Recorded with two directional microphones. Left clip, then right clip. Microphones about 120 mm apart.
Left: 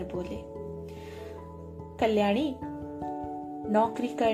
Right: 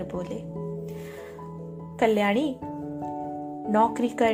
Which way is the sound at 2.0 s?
45° right (ahead or behind).